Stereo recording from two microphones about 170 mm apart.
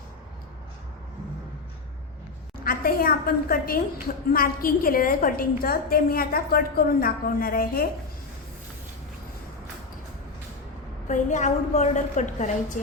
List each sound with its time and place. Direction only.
2.6 s a woman's voice: 60° left (ahead or behind)
11.1 s a woman's voice: 45° left (ahead or behind)